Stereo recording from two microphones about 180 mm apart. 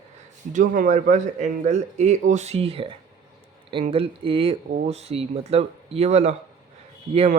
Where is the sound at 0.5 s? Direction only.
45° right (ahead or behind).